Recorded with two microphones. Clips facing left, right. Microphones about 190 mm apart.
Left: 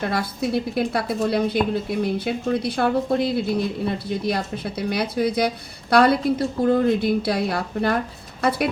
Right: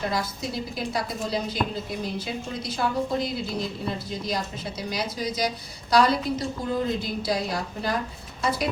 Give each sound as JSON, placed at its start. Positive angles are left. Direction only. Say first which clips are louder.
{"t": 0.1, "sound": "a woman's voice", "louder": "left 6 dB", "side_deg": 60}